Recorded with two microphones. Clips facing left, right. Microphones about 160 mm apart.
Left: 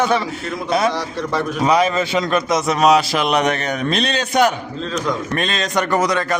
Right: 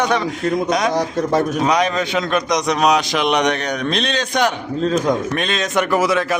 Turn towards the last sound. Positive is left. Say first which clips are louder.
# right 1 dB
turn(degrees=-5)  # may be behind; listen again after turning